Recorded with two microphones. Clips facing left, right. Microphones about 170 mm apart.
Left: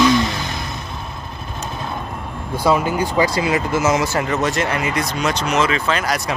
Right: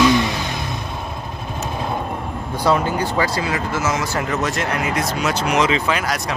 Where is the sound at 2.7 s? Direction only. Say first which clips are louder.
Left 1 dB; 15° left (ahead or behind).